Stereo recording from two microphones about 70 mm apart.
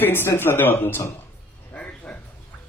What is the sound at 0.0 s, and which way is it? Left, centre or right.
Speech, left.